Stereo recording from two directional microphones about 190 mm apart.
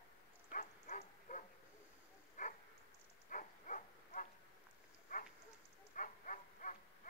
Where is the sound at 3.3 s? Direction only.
45° left (ahead or behind).